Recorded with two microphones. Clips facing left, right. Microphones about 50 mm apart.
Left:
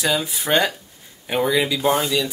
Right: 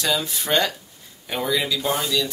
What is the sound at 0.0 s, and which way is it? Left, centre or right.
Speech, centre.